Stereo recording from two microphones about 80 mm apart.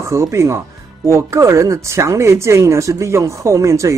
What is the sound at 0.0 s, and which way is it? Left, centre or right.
Speech, right.